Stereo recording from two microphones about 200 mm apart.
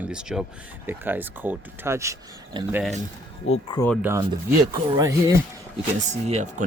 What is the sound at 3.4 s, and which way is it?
Speech, 75° left (ahead or behind).